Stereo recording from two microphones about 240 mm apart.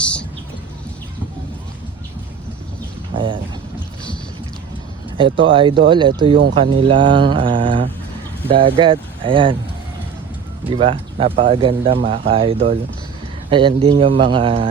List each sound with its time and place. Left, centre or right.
0.0 s a sound: centre
3.2 s speech: centre
5.1 s speech: right
10.7 s speech: right